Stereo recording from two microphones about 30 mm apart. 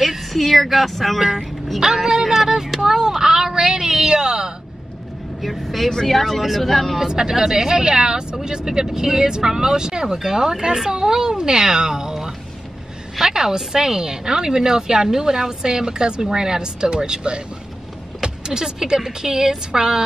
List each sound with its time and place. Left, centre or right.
0.3 s speech: centre
2.0 s a sound: centre
5.6 s speech: centre
7.0 s a woman's voice: right